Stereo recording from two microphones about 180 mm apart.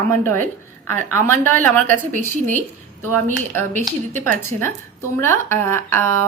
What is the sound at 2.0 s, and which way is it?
Speech, 45° right (ahead or behind).